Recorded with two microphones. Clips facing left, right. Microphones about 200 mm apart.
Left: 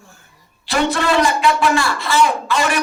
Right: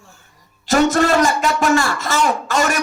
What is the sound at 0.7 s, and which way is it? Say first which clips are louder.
A man's voice: right 4 dB; 45° right (ahead or behind).